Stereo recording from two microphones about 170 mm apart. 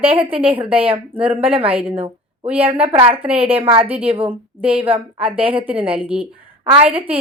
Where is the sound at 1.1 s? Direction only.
10° right (ahead or behind).